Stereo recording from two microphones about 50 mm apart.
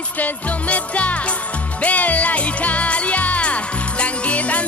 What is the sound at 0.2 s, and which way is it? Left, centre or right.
Music, left.